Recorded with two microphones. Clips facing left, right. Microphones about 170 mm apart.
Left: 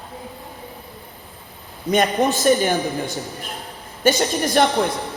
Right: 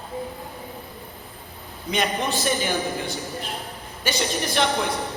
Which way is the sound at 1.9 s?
50° left (ahead or behind).